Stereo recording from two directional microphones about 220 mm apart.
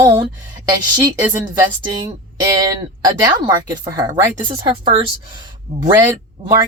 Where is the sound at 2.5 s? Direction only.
15° right (ahead or behind).